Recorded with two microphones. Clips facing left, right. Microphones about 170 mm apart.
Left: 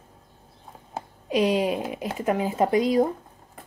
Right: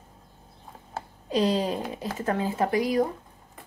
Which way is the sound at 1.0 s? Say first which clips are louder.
Left 2 dB; 10° left (ahead or behind).